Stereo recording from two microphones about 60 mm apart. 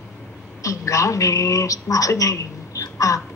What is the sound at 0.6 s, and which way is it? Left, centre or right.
Speech, left.